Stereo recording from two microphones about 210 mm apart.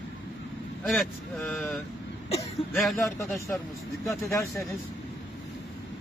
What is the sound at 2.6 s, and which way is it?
Speech, 25° left (ahead or behind).